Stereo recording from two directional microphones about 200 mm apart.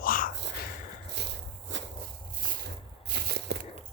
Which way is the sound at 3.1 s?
55° right (ahead or behind).